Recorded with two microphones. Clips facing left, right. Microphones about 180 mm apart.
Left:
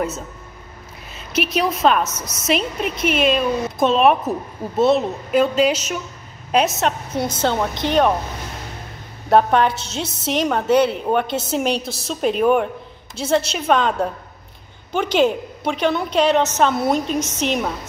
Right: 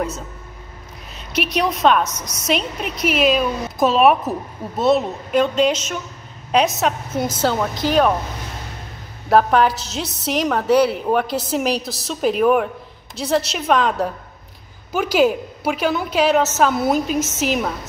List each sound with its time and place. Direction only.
1.1 s a woman's voice: centre (ahead or behind)
2.0 s a woman's voice: 25° left (ahead or behind)
2.4 s a woman's voice: centre (ahead or behind)
9.3 s a woman's voice: centre (ahead or behind)